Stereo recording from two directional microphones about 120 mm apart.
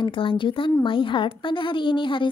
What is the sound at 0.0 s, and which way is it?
A woman's voice, 45° left (ahead or behind).